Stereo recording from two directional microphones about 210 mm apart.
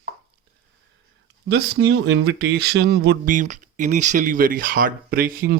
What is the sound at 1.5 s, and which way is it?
Speech, 55° right (ahead or behind).